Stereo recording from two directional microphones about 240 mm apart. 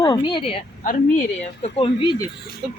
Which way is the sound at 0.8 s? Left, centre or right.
Left.